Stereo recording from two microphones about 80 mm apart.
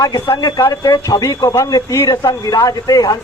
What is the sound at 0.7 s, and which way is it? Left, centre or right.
Speech, left.